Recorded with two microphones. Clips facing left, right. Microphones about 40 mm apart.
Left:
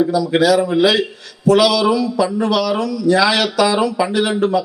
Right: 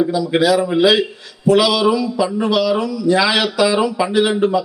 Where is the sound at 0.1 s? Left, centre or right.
Right.